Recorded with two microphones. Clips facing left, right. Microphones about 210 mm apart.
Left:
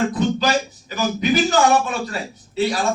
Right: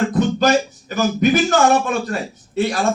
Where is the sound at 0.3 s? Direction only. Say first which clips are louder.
Right 5 dB; 50° right (ahead or behind).